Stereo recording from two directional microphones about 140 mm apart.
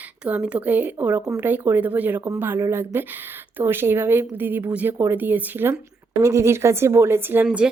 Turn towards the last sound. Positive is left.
turn(degrees=-10)  # may be behind; listen again after turning